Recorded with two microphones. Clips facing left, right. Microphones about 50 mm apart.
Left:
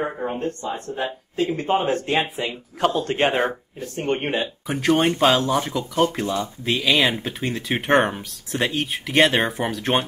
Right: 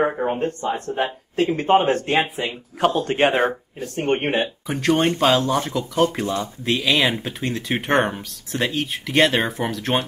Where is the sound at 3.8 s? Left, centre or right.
Right.